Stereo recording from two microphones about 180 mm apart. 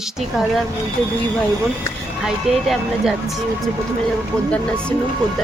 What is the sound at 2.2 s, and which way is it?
Speech, 5° right (ahead or behind).